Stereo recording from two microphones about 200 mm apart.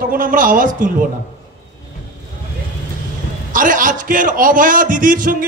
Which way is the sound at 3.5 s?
40° right (ahead or behind).